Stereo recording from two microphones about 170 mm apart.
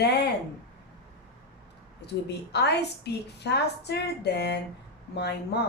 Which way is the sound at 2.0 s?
80° left.